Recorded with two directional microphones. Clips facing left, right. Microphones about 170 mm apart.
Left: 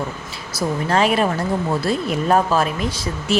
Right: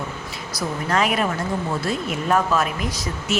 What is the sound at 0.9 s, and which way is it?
Speech, 30° left (ahead or behind).